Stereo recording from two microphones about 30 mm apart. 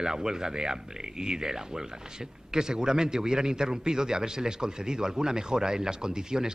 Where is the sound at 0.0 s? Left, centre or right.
Centre.